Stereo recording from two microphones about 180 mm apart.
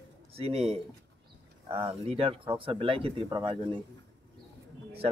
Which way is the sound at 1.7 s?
30° right (ahead or behind).